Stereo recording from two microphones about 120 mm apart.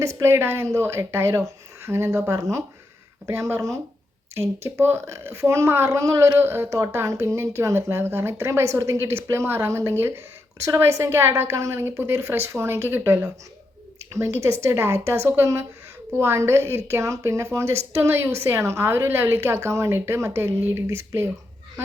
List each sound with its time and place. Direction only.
0.0 s speech: 25° right (ahead or behind)